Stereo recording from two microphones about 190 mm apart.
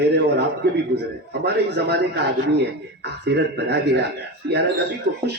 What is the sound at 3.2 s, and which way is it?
Speech, 65° right (ahead or behind).